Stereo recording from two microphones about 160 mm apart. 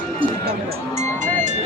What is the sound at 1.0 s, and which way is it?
Music, 50° right (ahead or behind).